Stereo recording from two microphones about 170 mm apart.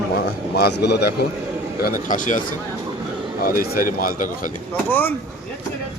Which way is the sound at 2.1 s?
50° left (ahead or behind).